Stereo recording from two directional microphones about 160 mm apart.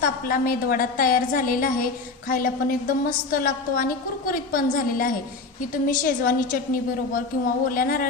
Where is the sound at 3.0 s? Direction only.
60° left (ahead or behind).